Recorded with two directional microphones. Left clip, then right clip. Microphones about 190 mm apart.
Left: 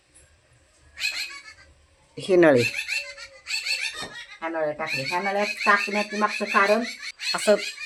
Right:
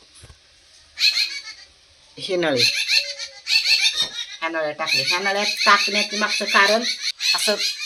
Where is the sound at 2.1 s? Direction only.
45° left (ahead or behind).